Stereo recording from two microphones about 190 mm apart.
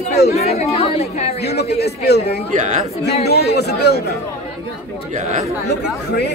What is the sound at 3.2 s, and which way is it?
Speech, 55° left (ahead or behind).